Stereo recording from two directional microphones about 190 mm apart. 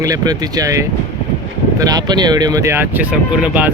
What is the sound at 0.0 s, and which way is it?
Speech, 20° right (ahead or behind).